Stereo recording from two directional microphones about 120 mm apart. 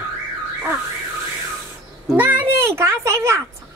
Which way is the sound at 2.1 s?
15° right (ahead or behind).